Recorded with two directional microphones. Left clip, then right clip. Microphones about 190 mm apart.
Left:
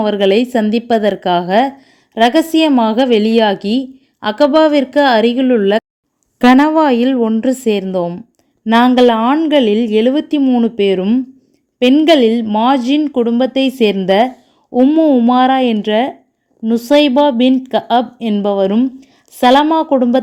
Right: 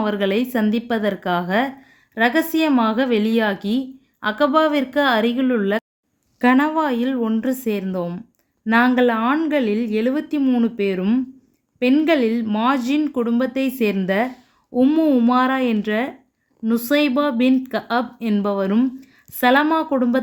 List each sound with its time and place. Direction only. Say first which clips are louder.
0.0 s a woman's voice: left 8 dB; 25° left (ahead or behind)
14.7 s a woman's voice: left 7 dB; 20° left (ahead or behind)